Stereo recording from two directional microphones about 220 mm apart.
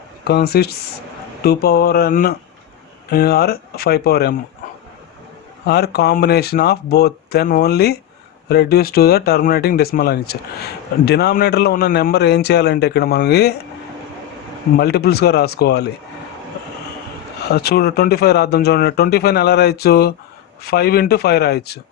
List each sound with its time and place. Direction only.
0.3 s speech: 45° left (ahead or behind)
5.6 s speech: 45° left (ahead or behind)
14.8 s speech: 45° left (ahead or behind)
17.5 s speech: 45° left (ahead or behind)